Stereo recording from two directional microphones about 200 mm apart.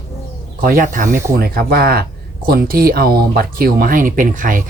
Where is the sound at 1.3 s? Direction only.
50° right (ahead or behind).